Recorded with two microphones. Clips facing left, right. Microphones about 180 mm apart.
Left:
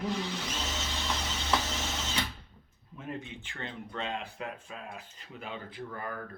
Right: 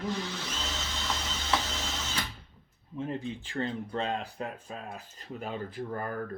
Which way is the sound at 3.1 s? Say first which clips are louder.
Even; 35° right (ahead or behind).